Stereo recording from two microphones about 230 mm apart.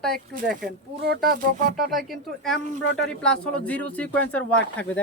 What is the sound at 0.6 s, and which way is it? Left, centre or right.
Speech, right.